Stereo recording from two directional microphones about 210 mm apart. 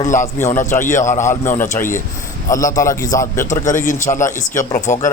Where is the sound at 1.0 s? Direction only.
35° left (ahead or behind).